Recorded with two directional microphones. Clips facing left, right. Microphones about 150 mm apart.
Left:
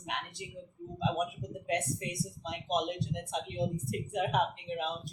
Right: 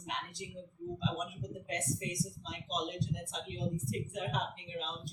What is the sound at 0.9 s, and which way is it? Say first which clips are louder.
Speech: left 7 dB; 60° left (ahead or behind).